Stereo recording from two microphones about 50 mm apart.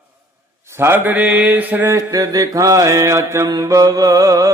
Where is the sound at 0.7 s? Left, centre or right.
Right.